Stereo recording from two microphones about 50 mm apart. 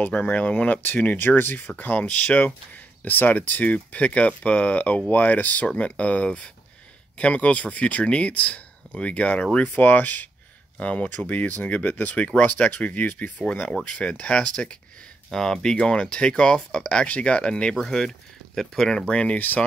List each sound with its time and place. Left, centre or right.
0.1 s speech: left
2.0 s speech: left
2.4 s speech: left
13.4 s speech: centre
19.0 s speech: left